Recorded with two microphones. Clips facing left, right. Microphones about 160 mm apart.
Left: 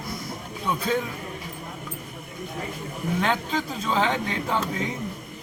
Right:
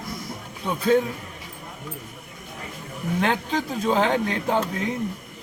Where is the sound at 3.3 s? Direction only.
55° right (ahead or behind).